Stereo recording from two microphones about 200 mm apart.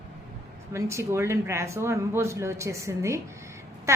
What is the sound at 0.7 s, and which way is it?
Speech, 15° right (ahead or behind).